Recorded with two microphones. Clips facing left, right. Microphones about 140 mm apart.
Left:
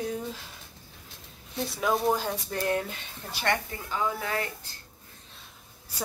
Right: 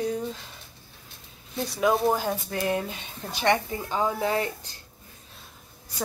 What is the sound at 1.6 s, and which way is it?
Speech, centre (ahead or behind).